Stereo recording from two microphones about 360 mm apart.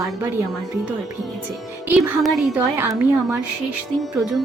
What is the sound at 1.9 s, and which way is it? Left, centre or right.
Speech, centre.